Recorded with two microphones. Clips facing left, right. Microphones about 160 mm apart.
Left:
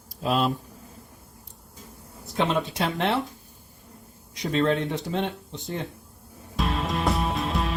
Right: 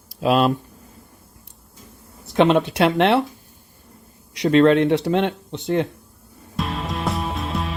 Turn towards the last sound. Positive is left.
turn(degrees=0)  # may be behind; listen again after turning